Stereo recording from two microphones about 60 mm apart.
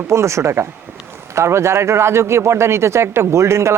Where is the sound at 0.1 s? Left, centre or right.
Right.